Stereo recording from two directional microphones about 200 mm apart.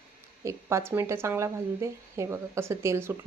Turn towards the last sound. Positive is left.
turn(degrees=-10)  # may be behind; listen again after turning